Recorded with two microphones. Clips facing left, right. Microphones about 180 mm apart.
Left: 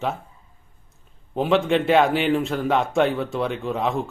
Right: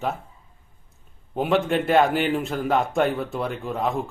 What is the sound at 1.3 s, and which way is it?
Speech, 5° right (ahead or behind).